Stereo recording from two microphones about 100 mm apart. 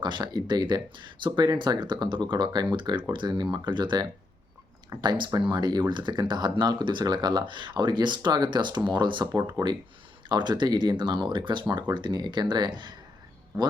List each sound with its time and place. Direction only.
0.0 s speech: 45° right (ahead or behind)